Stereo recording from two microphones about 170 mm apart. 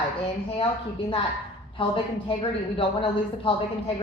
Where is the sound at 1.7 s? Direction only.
30° left (ahead or behind).